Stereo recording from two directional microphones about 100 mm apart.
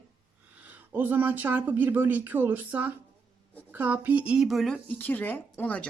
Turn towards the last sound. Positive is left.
turn(degrees=15)  # may be behind; listen again after turning